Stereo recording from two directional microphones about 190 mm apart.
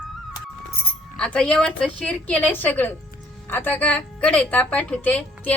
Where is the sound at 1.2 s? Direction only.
5° left (ahead or behind).